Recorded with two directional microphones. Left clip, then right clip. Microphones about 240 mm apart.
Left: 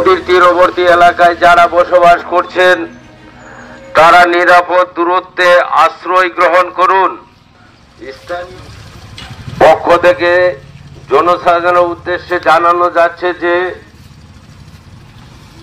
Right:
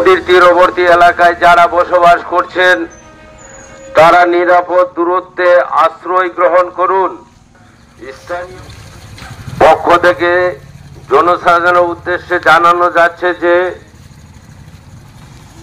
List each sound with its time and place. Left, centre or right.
0.0 s a man's voice: left
3.9 s a man's voice: left
8.0 s a man's voice: left
9.6 s a man's voice: centre